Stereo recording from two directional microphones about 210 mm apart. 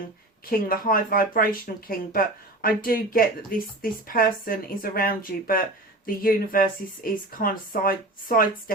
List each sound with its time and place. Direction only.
0.5 s speech: 45° left (ahead or behind)